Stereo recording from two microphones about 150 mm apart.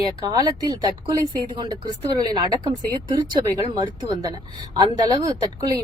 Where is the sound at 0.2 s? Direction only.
25° right (ahead or behind).